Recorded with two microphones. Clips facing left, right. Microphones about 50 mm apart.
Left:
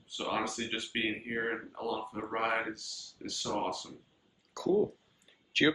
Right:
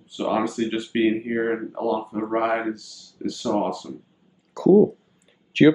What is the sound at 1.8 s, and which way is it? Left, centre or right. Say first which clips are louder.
Speech: right 11 dB; right.